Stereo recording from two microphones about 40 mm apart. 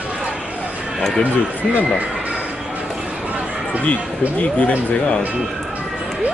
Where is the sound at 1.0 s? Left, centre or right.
Centre.